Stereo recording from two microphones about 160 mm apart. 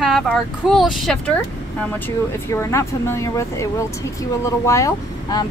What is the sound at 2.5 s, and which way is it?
A woman's voice, 20° left (ahead or behind).